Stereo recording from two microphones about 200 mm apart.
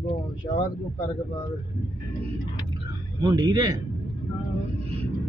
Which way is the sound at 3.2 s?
20° right (ahead or behind).